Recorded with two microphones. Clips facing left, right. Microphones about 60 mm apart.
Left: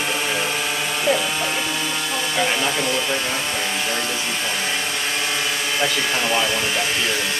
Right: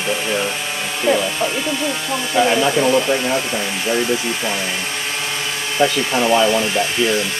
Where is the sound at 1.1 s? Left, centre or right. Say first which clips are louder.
Right 4 dB; right.